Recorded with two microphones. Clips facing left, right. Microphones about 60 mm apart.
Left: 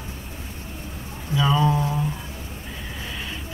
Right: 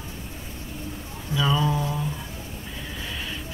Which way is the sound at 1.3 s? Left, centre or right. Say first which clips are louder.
Left 3 dB; centre.